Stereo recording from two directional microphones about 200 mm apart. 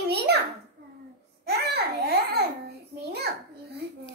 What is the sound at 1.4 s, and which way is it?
Babbling, 55° right (ahead or behind).